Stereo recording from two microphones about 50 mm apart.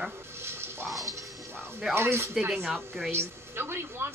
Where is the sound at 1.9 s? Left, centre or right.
Right.